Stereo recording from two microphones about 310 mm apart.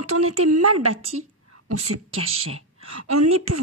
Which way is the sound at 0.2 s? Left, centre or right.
Right.